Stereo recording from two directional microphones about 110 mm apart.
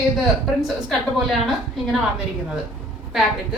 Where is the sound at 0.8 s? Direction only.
Centre (ahead or behind).